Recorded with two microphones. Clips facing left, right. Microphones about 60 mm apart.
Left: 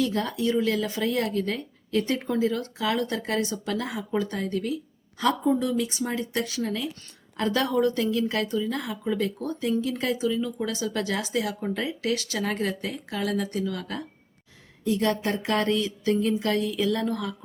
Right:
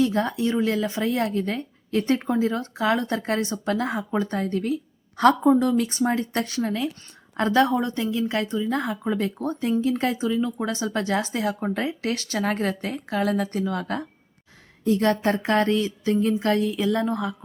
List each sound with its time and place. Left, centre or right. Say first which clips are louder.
0.0 s speech: right 3 dB; right
5.1 s speech: right 6 dB; right